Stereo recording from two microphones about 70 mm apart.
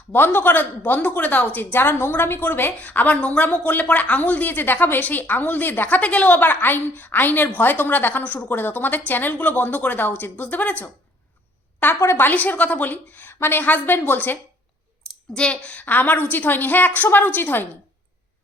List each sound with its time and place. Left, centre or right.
0.1 s a woman's voice: left
11.9 s a woman's voice: left
15.3 s a woman's voice: centre